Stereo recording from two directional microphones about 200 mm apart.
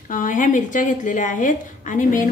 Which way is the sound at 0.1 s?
40° left (ahead or behind).